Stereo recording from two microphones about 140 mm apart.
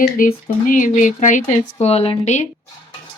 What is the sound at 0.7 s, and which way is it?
Speech, 65° left (ahead or behind).